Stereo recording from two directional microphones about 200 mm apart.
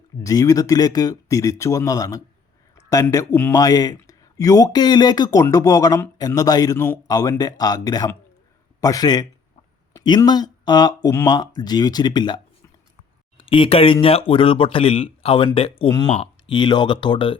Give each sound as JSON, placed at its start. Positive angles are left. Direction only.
{"t": 0.2, "sound": "speech", "side_deg": 15}